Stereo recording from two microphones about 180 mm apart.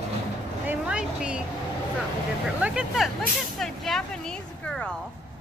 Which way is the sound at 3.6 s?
Centre (ahead or behind).